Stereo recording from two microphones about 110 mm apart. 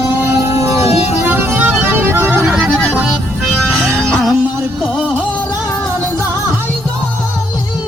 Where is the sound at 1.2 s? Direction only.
15° right (ahead or behind).